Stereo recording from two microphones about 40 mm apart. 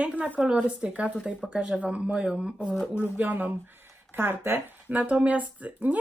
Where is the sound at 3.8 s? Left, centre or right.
Right.